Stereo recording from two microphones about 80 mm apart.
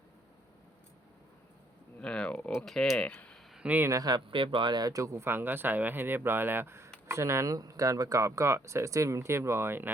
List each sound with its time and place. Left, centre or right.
2.0 s speech: centre
3.8 s speech: right
4.1 s speech: right